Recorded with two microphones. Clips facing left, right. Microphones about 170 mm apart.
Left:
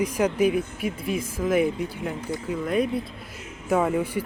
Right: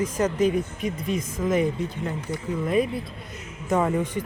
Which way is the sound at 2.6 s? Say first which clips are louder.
Right 1 dB; centre (ahead or behind).